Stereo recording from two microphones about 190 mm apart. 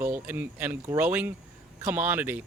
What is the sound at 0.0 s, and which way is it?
Speech, 10° right (ahead or behind).